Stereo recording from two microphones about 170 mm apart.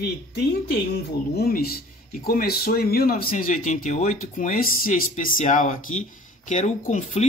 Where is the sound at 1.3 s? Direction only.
65° left (ahead or behind).